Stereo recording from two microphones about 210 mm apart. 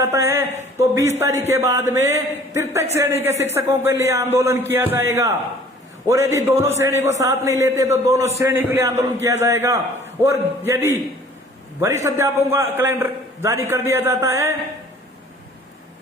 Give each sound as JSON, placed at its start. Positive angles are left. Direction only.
{"t": 0.0, "sound": "a man's voice", "side_deg": -15}
{"t": 12.0, "sound": "a man's voice", "side_deg": -15}